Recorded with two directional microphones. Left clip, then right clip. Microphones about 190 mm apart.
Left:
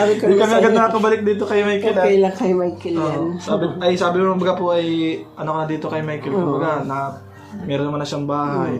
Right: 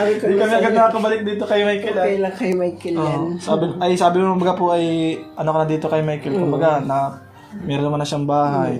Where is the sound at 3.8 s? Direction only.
40° right (ahead or behind).